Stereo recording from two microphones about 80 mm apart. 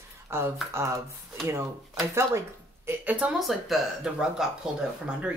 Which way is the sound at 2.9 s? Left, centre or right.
Centre.